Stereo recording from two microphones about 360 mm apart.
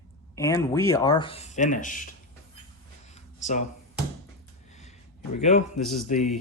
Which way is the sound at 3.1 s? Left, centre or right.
Centre.